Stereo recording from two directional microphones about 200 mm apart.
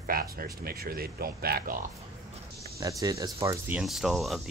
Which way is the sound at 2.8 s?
15° right (ahead or behind).